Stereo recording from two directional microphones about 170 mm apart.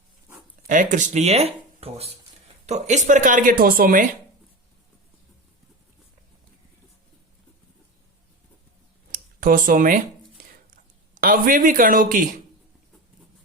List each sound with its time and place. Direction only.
0.7 s speech: 50° right (ahead or behind)
9.1 s speech: 55° right (ahead or behind)
11.1 s speech: 55° right (ahead or behind)